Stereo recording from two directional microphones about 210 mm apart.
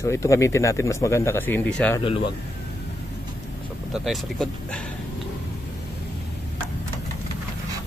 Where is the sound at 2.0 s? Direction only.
25° left (ahead or behind).